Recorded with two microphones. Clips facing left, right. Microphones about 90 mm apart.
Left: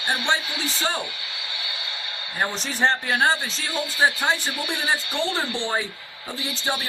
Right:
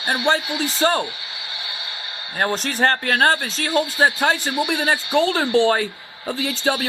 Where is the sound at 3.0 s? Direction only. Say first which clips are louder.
Right 3 dB; 75° right (ahead or behind).